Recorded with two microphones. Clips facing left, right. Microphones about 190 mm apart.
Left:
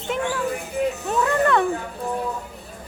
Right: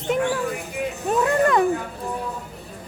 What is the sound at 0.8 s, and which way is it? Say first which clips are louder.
Speech: left 5 dB; 35° left (ahead or behind).